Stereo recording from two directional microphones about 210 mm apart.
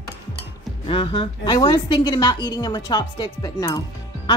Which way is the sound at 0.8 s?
25° left (ahead or behind).